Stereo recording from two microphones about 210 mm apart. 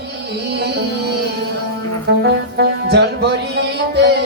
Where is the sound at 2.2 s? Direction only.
50° right (ahead or behind).